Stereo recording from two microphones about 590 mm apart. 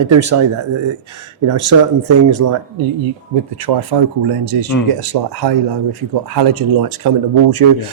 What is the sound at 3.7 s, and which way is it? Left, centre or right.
Speech, right.